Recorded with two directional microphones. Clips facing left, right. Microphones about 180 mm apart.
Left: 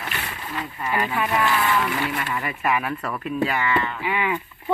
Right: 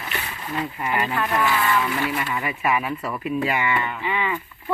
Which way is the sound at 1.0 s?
10° left (ahead or behind).